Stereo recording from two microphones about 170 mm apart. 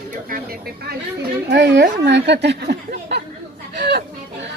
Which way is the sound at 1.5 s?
90° right.